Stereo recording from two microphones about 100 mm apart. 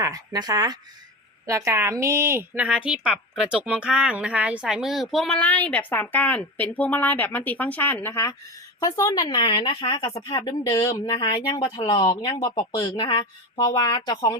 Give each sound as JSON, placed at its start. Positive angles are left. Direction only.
{"t": 0.0, "sound": "a woman's voice", "side_deg": -35}
{"t": 2.6, "sound": "a woman's voice", "side_deg": -10}
{"t": 5.4, "sound": "a woman's voice", "side_deg": 15}
{"t": 9.6, "sound": "speech", "side_deg": 55}
{"t": 10.6, "sound": "speech", "side_deg": 35}
{"t": 12.0, "sound": "speech", "side_deg": 60}